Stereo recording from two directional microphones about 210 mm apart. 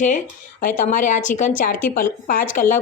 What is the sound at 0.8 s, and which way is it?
A woman's voice, 40° left (ahead or behind).